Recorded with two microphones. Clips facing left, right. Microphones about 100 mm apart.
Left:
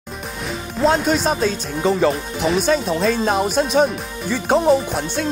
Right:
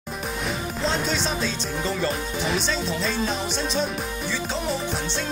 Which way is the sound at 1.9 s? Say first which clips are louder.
Left 10 dB; 75° left (ahead or behind).